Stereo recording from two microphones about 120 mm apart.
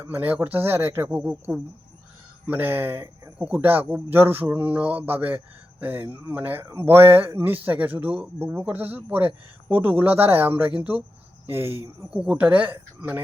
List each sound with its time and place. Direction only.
0.0 s speech: 15° right (ahead or behind)
2.5 s speech: 15° right (ahead or behind)